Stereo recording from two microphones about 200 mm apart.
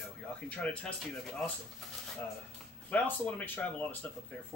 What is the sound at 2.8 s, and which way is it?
Speech, 10° left (ahead or behind).